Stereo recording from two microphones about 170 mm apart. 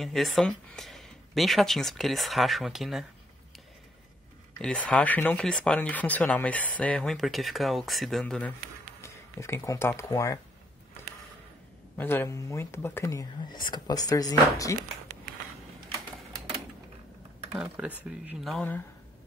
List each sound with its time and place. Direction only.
0.0 s speech: centre (ahead or behind)
4.6 s speech: 5° left (ahead or behind)
9.0 s speech: 15° left (ahead or behind)
12.0 s speech: 15° left (ahead or behind)
17.8 s speech: 10° right (ahead or behind)